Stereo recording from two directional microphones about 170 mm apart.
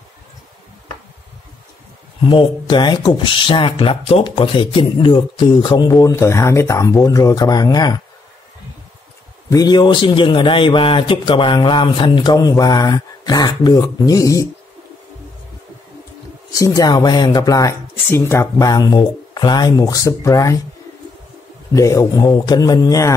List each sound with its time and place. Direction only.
2.2 s speech: 30° left (ahead or behind)
9.5 s speech: 25° left (ahead or behind)
16.5 s speech: 20° left (ahead or behind)
21.7 s speech: 20° left (ahead or behind)